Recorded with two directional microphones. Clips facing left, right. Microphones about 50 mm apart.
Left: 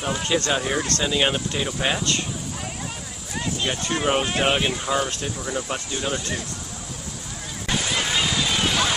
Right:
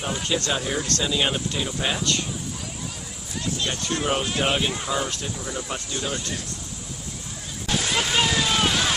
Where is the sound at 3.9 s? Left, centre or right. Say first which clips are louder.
Left 3 dB; left.